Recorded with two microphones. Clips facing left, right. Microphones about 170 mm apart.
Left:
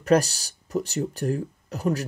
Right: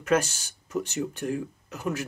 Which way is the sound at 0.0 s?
35° left (ahead or behind).